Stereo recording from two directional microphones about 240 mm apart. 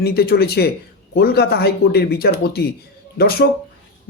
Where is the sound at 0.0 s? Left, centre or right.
Left.